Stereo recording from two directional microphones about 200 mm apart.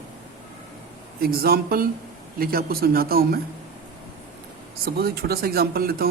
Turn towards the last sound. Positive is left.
turn(degrees=-50)  # may be behind; listen again after turning